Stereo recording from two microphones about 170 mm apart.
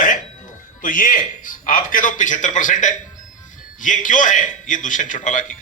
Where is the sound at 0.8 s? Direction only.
50° left (ahead or behind).